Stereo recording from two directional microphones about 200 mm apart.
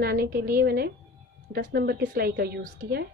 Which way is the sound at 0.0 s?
50° right (ahead or behind).